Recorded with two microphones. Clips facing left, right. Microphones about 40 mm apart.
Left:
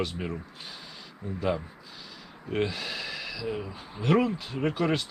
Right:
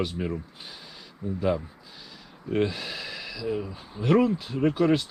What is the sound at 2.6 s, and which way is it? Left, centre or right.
Speech, centre.